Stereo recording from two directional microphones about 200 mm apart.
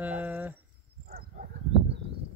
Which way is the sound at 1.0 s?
45° right (ahead or behind).